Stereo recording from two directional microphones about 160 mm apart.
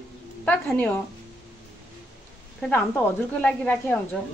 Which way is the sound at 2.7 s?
10° left (ahead or behind).